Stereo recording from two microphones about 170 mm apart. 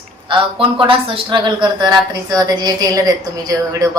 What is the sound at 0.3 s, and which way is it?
A man's voice, 30° right (ahead or behind).